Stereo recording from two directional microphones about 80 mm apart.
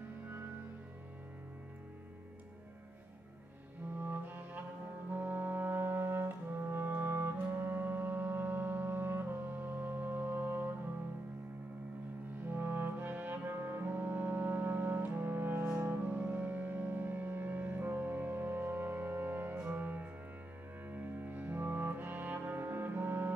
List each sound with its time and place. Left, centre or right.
4.0 s music: right
12.4 s music: right